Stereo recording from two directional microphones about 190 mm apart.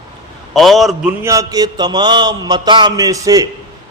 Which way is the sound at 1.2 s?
15° right (ahead or behind).